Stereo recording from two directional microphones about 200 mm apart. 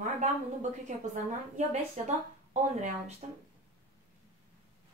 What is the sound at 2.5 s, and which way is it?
Speech, 35° right (ahead or behind).